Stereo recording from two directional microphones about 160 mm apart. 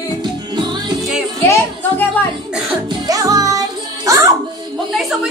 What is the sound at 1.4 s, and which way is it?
Music, 15° left (ahead or behind).